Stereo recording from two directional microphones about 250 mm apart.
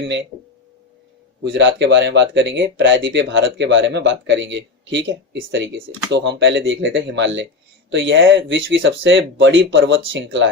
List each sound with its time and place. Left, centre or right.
0.0 s speech: right
1.5 s speech: right